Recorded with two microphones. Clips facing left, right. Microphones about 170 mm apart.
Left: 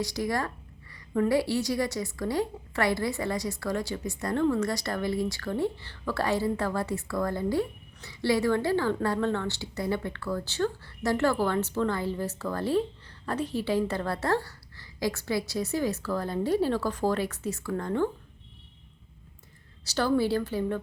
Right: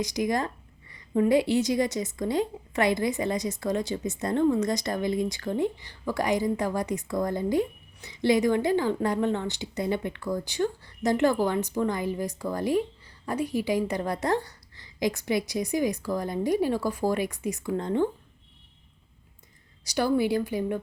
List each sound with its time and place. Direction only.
0.0 s a woman's voice: 20° right (ahead or behind)
19.8 s a woman's voice: 15° right (ahead or behind)